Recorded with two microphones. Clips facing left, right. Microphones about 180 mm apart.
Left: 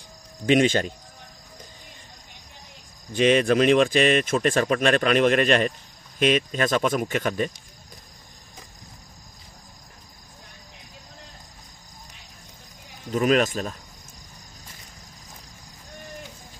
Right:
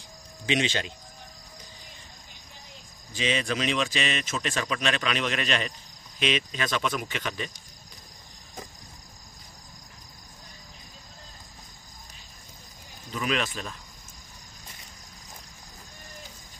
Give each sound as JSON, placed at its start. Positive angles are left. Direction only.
{"t": 0.5, "sound": "speech", "side_deg": 50}
{"t": 3.1, "sound": "speech", "side_deg": 55}
{"t": 13.1, "sound": "speech", "side_deg": 45}